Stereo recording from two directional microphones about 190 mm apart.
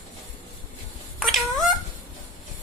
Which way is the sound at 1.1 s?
Centre (ahead or behind).